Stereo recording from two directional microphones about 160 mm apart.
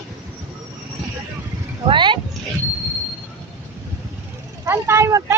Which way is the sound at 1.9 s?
30° right (ahead or behind).